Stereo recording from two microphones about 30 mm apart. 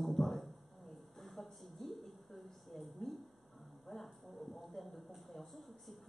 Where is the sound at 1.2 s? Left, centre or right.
Centre.